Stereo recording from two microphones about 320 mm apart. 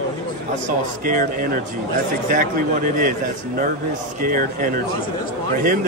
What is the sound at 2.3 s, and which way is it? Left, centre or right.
Speech, right.